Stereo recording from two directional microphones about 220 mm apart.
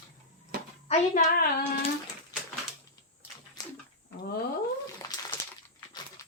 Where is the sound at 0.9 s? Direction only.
40° left (ahead or behind).